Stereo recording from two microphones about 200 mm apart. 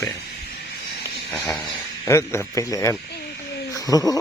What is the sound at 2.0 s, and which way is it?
A man's voice, 15° left (ahead or behind).